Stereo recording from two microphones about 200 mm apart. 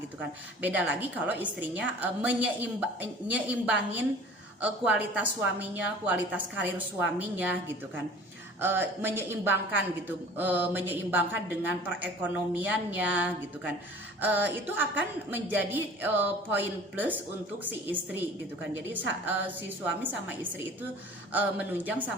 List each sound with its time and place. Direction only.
0.6 s a woman's voice: 5° right (ahead or behind)
20.0 s a woman's voice: 10° right (ahead or behind)